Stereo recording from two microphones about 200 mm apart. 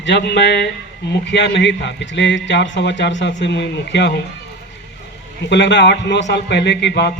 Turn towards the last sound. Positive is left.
turn(degrees=60)  # may be behind; listen again after turning